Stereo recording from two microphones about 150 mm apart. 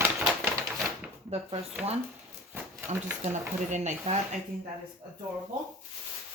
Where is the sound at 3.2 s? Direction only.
50° right (ahead or behind).